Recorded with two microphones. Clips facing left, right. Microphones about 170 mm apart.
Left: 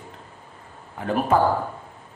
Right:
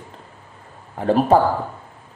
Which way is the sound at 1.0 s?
35° right (ahead or behind).